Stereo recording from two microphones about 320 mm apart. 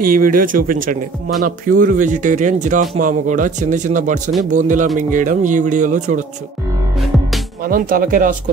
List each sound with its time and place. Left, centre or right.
0.0 s speech: right
7.6 s speech: right